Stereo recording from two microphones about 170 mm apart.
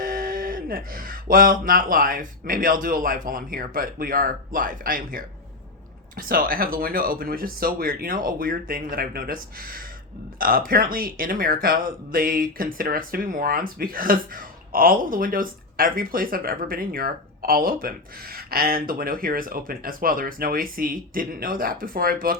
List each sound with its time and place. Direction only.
0.0 s speech: 55° right (ahead or behind)